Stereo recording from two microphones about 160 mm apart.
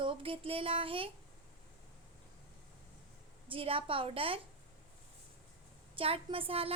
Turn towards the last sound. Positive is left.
turn(degrees=-35)  # may be behind; listen again after turning